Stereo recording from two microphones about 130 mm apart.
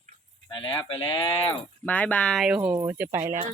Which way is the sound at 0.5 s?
40° left (ahead or behind).